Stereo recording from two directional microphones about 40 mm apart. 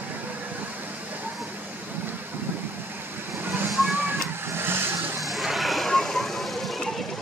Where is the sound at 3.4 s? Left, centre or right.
Right.